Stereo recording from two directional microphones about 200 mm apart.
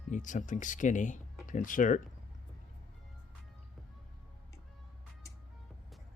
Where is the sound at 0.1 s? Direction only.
40° left (ahead or behind).